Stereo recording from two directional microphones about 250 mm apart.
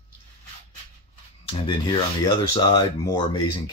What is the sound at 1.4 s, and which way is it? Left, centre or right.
Speech, centre.